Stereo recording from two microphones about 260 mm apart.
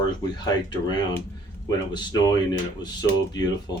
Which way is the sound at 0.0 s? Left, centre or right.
Centre.